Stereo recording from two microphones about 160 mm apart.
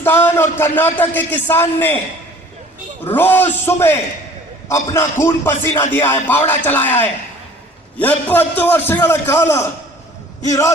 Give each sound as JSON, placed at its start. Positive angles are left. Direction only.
{"t": 0.0, "sound": "a man's voice", "side_deg": 15}
{"t": 3.0, "sound": "a man's voice", "side_deg": 10}